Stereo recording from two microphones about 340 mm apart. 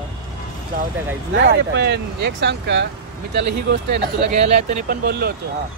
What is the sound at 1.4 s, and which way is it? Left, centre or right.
Speech, right.